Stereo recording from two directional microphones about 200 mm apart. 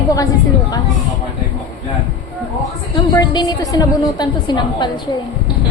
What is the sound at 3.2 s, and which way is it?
A woman's voice, 20° left (ahead or behind).